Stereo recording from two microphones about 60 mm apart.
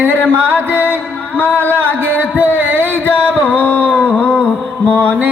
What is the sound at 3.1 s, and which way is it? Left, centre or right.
Music, right.